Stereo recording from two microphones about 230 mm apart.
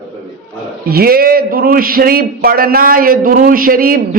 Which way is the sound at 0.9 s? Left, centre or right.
Right.